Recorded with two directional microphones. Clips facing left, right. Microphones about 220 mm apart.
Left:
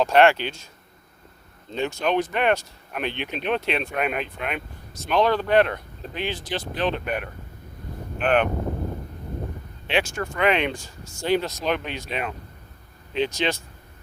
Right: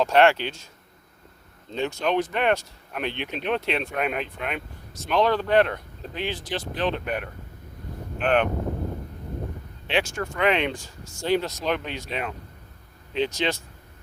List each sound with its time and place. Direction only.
0.0 s speech: 15° left (ahead or behind)
1.7 s speech: 10° left (ahead or behind)
9.8 s speech: 15° left (ahead or behind)